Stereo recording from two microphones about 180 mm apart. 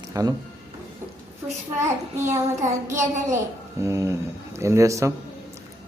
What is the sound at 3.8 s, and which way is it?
Speech, 15° right (ahead or behind).